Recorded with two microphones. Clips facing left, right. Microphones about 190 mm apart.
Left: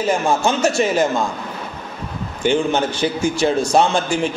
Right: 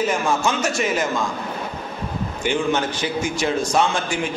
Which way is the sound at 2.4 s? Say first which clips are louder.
Left 4 dB; 30° left (ahead or behind).